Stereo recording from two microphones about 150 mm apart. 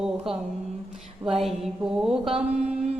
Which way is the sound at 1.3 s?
Centre (ahead or behind).